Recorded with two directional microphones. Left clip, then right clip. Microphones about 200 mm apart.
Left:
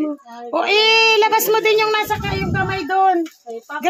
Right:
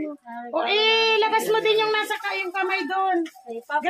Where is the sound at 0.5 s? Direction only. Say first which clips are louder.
Left 6 dB; 55° left (ahead or behind).